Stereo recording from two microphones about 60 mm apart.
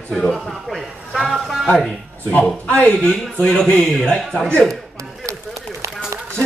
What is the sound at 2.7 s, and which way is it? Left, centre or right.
A man's voice, left.